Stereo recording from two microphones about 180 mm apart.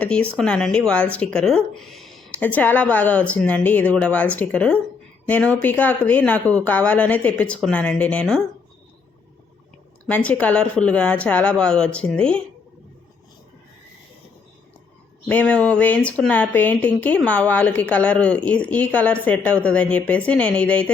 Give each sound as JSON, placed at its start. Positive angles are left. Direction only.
{"t": 0.0, "sound": "speech", "side_deg": 5}
{"t": 10.1, "sound": "speech", "side_deg": 10}
{"t": 15.3, "sound": "speech", "side_deg": 10}